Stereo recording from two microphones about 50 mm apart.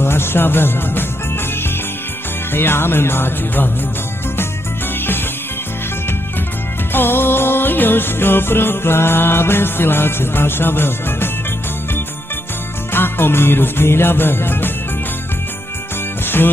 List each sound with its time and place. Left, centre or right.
0.0 s music: left
2.5 s music: left
6.9 s music: left
12.9 s music: left